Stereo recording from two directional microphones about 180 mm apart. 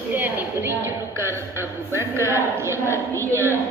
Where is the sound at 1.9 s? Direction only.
15° right (ahead or behind).